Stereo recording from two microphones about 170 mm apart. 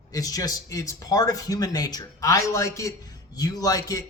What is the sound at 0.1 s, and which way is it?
A woman's voice, 20° left (ahead or behind).